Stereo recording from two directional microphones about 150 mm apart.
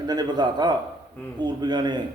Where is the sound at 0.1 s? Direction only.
30° right (ahead or behind).